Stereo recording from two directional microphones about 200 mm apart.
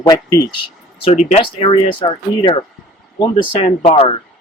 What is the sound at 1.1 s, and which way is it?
Speech, 35° left (ahead or behind).